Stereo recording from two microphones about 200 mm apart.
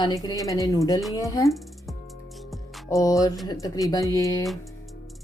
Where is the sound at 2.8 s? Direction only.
15° left (ahead or behind).